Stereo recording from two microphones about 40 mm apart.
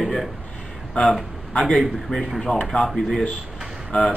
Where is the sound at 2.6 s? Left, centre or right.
Centre.